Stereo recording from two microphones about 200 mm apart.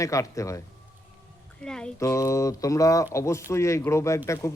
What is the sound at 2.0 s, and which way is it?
Speech, 15° left (ahead or behind).